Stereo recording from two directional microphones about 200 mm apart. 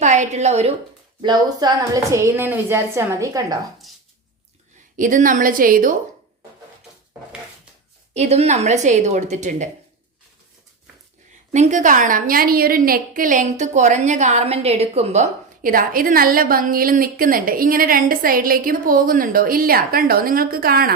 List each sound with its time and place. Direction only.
0.0 s a woman's voice: 35° right (ahead or behind)
1.2 s a woman's voice: 20° right (ahead or behind)
4.9 s a woman's voice: 40° right (ahead or behind)
8.1 s speech: 35° right (ahead or behind)
11.5 s a woman's voice: 35° right (ahead or behind)